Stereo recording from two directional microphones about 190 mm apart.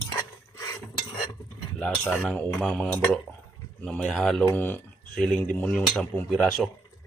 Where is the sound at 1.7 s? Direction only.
5° left (ahead or behind).